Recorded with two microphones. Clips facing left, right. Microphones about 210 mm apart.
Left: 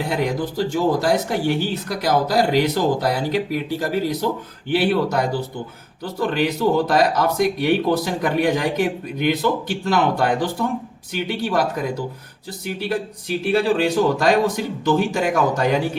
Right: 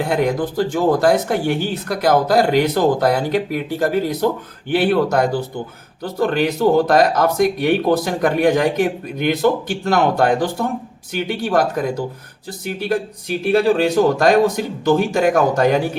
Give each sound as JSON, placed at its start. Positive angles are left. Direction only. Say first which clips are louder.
{"t": 0.0, "sound": "speech", "louder": "right 4 dB", "side_deg": -50}